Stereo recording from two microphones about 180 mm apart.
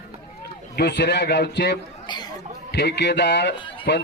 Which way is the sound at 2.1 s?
25° left (ahead or behind).